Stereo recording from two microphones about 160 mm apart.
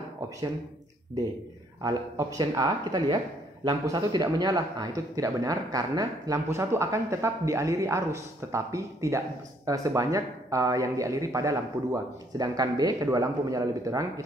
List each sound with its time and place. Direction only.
1.8 s speech: 25° right (ahead or behind)